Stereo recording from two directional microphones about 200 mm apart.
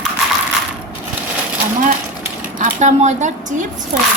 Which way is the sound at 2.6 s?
35° right (ahead or behind).